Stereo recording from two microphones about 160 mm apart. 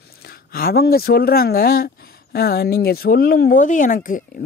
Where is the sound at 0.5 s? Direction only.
70° left (ahead or behind).